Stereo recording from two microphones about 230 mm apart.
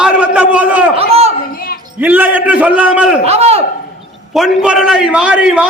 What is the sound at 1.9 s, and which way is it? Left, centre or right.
A man's voice, centre.